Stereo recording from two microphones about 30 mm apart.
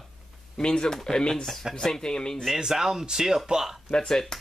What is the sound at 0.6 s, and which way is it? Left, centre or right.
Speech, left.